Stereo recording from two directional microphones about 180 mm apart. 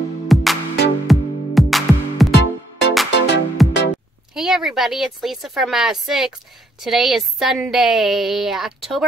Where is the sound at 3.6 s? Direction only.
Centre (ahead or behind).